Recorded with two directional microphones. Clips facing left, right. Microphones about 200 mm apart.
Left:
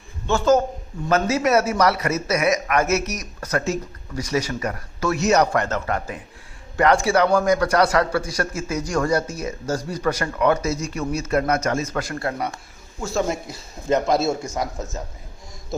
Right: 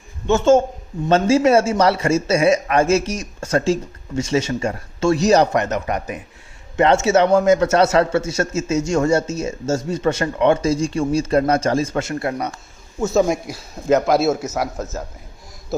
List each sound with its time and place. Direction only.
0.3 s a man's voice: 25° right (ahead or behind)
13.9 s a man's voice: centre (ahead or behind)